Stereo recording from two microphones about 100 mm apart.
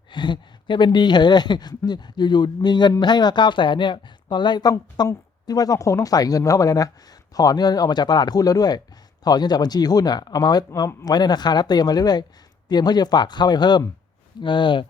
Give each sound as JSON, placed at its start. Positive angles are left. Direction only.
{"t": 0.1, "sound": "speech", "side_deg": 50}